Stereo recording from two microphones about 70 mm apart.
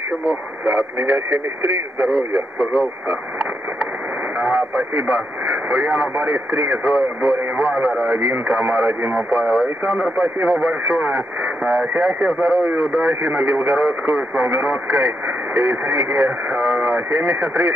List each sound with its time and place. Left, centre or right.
0.3 s speech: right